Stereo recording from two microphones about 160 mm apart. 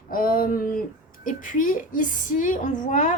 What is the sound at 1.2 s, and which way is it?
A woman's voice, 55° left (ahead or behind).